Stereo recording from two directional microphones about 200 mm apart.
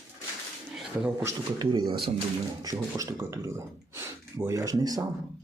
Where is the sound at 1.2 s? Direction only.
20° right (ahead or behind).